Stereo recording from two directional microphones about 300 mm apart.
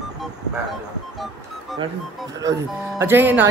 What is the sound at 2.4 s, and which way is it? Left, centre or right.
Speech, centre.